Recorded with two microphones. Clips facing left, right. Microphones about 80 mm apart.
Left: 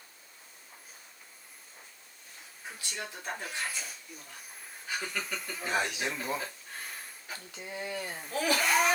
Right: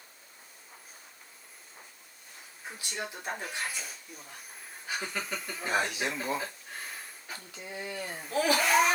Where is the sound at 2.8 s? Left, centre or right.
Right.